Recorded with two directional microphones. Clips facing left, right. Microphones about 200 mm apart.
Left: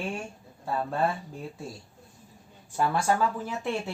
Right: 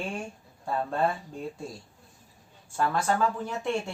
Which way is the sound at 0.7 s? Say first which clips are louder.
Even; centre (ahead or behind).